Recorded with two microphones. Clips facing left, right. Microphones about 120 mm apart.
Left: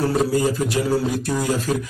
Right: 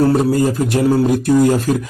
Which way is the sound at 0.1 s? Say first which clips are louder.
Right 5 dB; 55° right (ahead or behind).